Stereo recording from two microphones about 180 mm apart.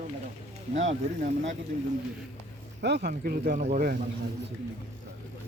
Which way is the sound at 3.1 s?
55° right (ahead or behind).